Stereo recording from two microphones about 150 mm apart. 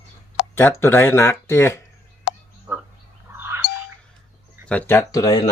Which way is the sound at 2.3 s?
90° left.